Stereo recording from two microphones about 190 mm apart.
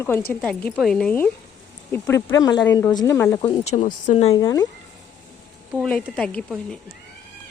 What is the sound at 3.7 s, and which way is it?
Speech, 40° left (ahead or behind).